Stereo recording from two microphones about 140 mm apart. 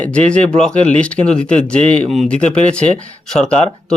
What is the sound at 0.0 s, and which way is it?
A man's voice, 10° left (ahead or behind).